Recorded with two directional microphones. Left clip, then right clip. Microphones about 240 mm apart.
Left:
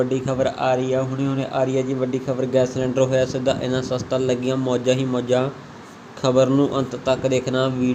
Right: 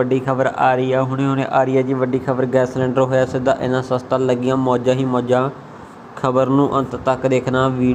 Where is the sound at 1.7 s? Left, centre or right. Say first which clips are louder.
Right 5 dB; right.